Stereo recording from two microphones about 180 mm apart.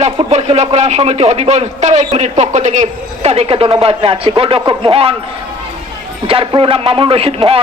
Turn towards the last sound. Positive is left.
turn(degrees=-30)  # may be behind; listen again after turning